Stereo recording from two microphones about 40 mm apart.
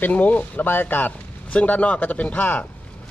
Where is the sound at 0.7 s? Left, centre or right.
Left.